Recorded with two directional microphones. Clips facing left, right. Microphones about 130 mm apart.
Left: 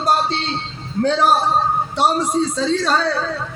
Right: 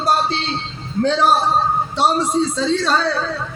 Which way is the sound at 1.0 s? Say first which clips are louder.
Even; 15° left (ahead or behind).